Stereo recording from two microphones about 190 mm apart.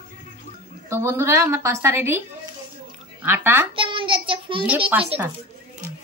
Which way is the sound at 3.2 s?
10° right (ahead or behind).